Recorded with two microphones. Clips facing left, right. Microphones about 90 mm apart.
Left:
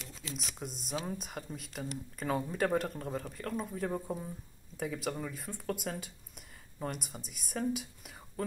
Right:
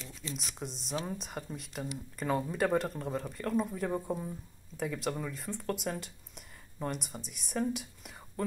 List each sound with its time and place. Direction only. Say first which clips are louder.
0.3 s speech: right 1 dB; centre (ahead or behind)